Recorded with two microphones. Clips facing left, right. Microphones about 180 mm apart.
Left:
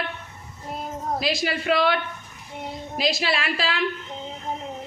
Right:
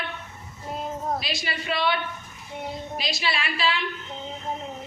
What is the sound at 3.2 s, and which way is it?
Speech, 90° left.